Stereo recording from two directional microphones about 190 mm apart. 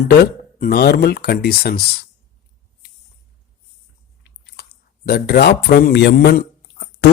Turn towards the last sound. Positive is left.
turn(degrees=55)  # may be behind; listen again after turning